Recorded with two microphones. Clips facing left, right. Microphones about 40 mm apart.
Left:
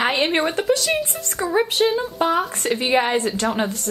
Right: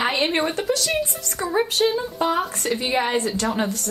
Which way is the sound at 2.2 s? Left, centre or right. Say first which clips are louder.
Left 2 dB; left.